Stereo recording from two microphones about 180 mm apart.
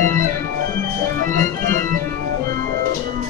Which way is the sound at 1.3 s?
45° right (ahead or behind).